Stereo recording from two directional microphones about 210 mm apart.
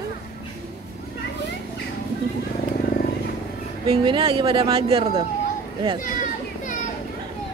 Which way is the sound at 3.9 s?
25° right (ahead or behind).